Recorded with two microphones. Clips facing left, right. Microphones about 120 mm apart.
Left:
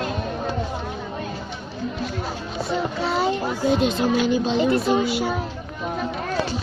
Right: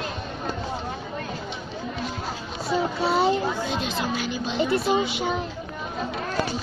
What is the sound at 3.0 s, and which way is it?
Speech, centre (ahead or behind).